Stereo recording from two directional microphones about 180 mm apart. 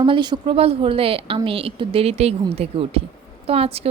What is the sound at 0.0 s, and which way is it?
Speech, 25° right (ahead or behind).